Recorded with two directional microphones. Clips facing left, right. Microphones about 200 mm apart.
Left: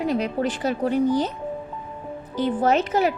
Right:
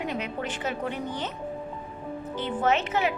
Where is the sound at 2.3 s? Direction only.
40° left (ahead or behind).